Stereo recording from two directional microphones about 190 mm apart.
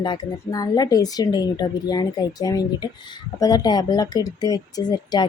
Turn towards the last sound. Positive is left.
turn(degrees=20)  # may be behind; listen again after turning